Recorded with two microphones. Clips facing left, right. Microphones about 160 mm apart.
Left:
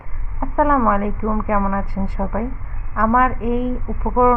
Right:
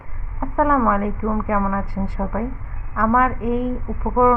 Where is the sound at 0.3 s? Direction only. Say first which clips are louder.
Left 1 dB; 15° left (ahead or behind).